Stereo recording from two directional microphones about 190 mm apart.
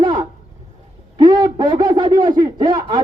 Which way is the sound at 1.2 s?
20° right (ahead or behind).